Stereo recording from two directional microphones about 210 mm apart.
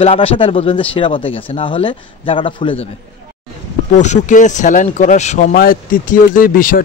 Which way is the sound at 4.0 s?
35° left (ahead or behind).